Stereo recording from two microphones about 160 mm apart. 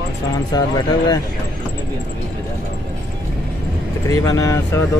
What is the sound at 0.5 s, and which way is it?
Speech, 25° left (ahead or behind).